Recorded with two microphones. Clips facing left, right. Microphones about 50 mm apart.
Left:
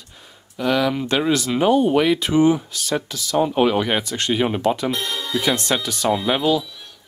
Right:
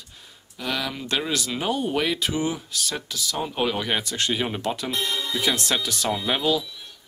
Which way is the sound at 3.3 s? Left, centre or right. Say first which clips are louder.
Left 9 dB; left.